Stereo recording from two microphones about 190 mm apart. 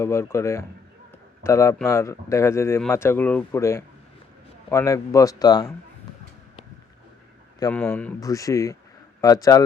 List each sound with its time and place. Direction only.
0.0 s speech: 15° left (ahead or behind)
7.7 s speech: 5° left (ahead or behind)
8.2 s speech: 15° left (ahead or behind)